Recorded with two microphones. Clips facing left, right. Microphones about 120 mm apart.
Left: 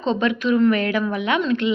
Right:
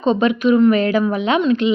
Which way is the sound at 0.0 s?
20° right (ahead or behind).